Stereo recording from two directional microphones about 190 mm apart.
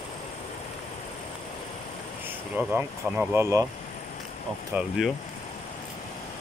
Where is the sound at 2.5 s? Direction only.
10° right (ahead or behind).